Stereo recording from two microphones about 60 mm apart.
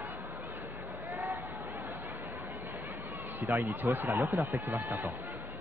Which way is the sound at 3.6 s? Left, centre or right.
Right.